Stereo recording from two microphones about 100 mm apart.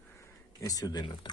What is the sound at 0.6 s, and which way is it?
Speech, 35° left (ahead or behind).